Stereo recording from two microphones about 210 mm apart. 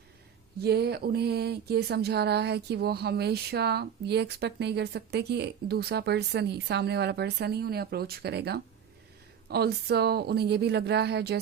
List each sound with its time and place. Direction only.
0.6 s speech: 50° right (ahead or behind)